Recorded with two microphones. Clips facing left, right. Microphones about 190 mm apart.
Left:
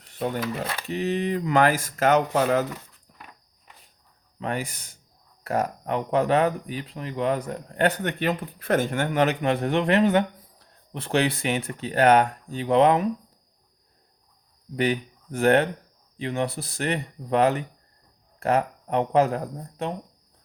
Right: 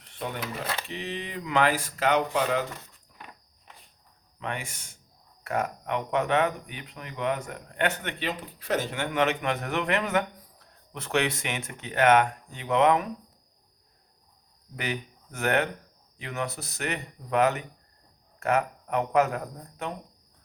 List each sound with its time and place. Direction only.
0.9 s speech: 45° left (ahead or behind)
4.4 s speech: 35° left (ahead or behind)
14.8 s speech: 30° left (ahead or behind)